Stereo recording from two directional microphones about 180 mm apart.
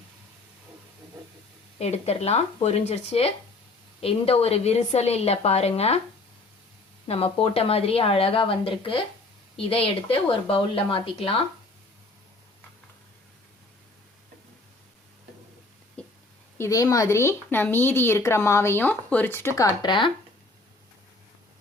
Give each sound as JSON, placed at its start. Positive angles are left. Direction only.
{"t": 1.8, "sound": "a woman's voice", "side_deg": 35}
{"t": 7.1, "sound": "a woman's voice", "side_deg": 35}
{"t": 16.0, "sound": "a sound", "side_deg": 5}
{"t": 16.6, "sound": "speech", "side_deg": 20}